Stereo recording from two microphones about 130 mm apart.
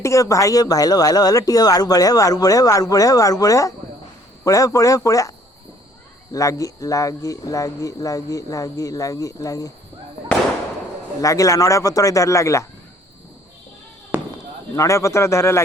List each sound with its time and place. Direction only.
0.0 s speech: 25° left (ahead or behind)
6.3 s speech: 25° left (ahead or behind)
11.2 s speech: 25° left (ahead or behind)
14.1 s basketball bounce: 15° right (ahead or behind)
14.8 s speech: 20° left (ahead or behind)